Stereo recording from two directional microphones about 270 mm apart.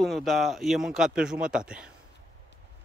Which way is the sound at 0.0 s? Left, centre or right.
Centre.